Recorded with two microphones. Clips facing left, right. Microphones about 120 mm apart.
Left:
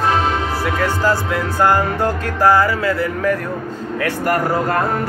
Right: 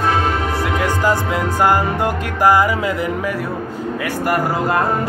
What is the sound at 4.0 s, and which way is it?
Speech, 10° right (ahead or behind).